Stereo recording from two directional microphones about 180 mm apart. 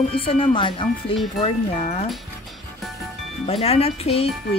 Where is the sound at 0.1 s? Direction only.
30° left (ahead or behind).